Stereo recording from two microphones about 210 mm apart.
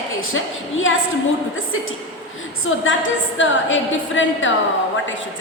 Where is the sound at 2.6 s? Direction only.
70° left (ahead or behind).